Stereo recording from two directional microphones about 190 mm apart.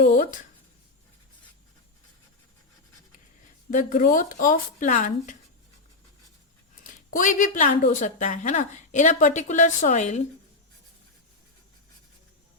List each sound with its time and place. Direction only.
0.0 s speech: 45° left (ahead or behind)
3.7 s speech: 40° left (ahead or behind)
6.8 s speech: 45° left (ahead or behind)